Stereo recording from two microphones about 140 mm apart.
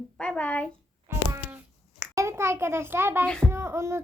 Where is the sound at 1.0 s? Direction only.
15° right (ahead or behind).